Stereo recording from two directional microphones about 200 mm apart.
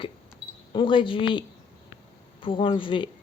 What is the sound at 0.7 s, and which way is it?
Speech, 25° left (ahead or behind).